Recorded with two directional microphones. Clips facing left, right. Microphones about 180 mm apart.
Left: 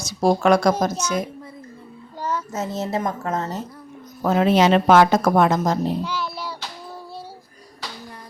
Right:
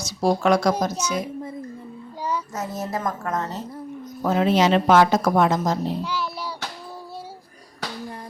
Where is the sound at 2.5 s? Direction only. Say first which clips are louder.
Left 3 dB; 25° left (ahead or behind).